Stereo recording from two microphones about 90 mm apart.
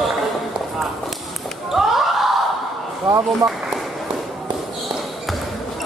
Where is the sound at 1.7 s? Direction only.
5° right (ahead or behind).